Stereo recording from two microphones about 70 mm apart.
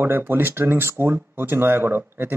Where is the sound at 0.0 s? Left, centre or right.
Right.